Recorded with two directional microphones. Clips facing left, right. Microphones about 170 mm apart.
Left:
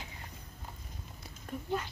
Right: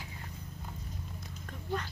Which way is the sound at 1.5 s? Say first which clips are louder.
Left 9 dB; 10° left (ahead or behind).